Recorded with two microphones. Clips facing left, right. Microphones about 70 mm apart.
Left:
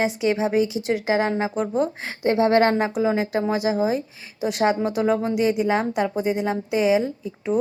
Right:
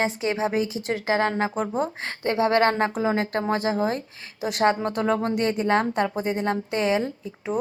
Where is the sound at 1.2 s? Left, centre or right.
Right.